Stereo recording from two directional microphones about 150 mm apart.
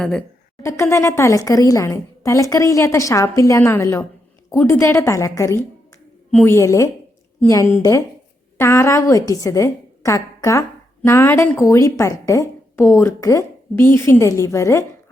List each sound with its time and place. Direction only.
0.0 s a woman's voice: 5° left (ahead or behind)
0.6 s a woman's voice: 20° left (ahead or behind)